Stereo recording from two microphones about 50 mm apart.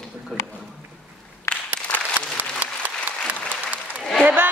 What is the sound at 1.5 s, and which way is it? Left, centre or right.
Applause, left.